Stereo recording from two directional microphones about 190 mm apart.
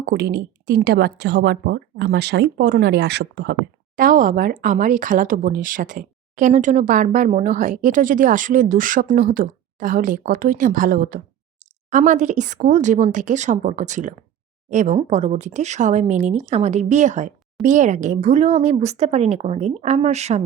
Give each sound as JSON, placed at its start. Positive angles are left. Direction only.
{"t": 0.0, "sound": "a woman's voice", "side_deg": -60}
{"t": 3.9, "sound": "speech", "side_deg": -45}